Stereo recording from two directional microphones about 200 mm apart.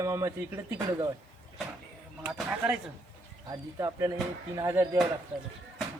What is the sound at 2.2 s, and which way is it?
A man's voice, 5° right (ahead or behind).